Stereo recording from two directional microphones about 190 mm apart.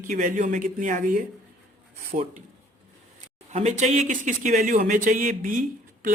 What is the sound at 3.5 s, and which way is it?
Speech, 35° right (ahead or behind).